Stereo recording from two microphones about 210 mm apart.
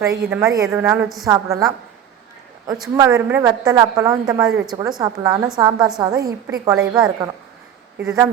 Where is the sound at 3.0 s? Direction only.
10° right (ahead or behind).